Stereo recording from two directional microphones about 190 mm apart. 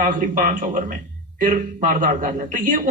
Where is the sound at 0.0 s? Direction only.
45° right (ahead or behind).